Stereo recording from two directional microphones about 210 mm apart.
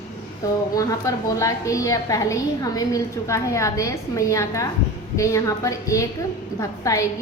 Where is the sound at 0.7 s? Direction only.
15° left (ahead or behind).